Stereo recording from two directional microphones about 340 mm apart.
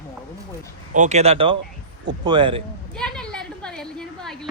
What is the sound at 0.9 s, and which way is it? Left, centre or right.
Speech, centre.